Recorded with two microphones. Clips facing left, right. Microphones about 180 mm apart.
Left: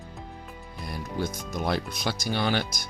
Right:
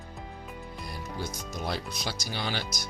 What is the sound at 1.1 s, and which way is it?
Speech, 55° left (ahead or behind).